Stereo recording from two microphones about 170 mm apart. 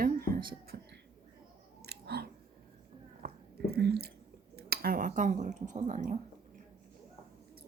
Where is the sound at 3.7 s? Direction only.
70° right (ahead or behind).